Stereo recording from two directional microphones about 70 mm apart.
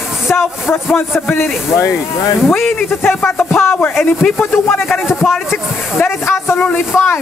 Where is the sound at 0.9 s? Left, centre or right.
Left.